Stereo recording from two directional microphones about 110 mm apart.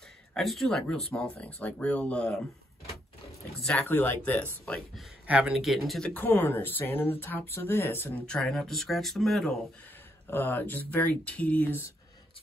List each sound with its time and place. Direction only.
0.3 s speech: centre (ahead or behind)
3.9 s speech: 20° left (ahead or behind)
5.2 s speech: 10° right (ahead or behind)
6.1 s speech: 15° left (ahead or behind)
8.3 s speech: 5° left (ahead or behind)
10.3 s speech: 20° left (ahead or behind)